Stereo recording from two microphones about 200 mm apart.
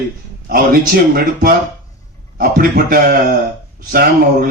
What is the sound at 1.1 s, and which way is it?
Speech, 50° right (ahead or behind).